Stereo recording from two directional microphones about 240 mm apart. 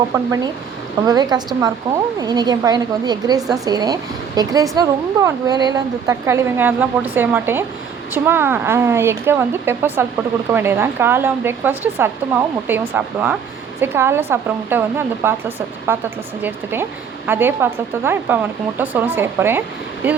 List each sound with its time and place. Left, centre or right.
0.1 s speech: centre
17.2 s speech: centre